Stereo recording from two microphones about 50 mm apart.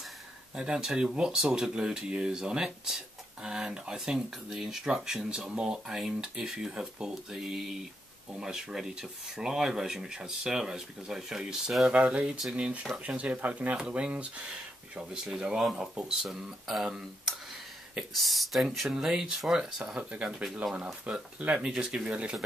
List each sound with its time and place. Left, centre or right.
0.6 s speech: centre
12.0 s speech: right